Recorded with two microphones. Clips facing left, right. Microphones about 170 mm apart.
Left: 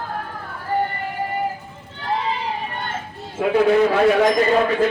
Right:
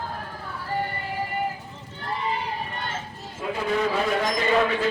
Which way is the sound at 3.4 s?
75° left (ahead or behind).